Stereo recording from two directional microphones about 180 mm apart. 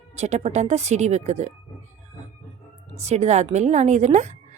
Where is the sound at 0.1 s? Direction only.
40° right (ahead or behind).